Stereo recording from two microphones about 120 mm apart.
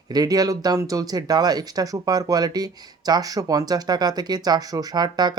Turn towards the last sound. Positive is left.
turn(degrees=-35)  # may be behind; listen again after turning